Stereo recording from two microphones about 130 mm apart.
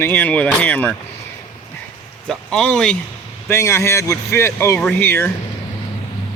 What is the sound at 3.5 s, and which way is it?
Speech, 20° left (ahead or behind).